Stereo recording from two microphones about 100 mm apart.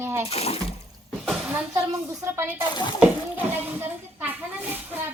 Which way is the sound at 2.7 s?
50° left (ahead or behind).